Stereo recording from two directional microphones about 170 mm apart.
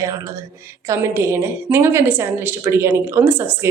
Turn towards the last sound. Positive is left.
turn(degrees=-10)  # may be behind; listen again after turning